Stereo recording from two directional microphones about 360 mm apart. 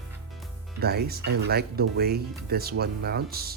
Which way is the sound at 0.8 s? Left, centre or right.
Right.